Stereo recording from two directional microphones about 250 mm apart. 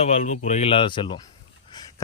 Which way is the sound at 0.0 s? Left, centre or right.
Left.